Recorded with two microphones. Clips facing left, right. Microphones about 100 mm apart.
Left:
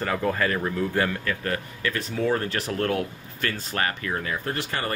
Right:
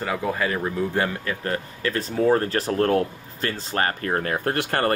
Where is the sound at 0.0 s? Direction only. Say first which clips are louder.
Even; 10° right (ahead or behind); by 3.9 s 30° right (ahead or behind).